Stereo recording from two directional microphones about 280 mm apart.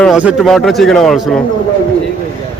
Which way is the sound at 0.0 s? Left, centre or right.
Centre.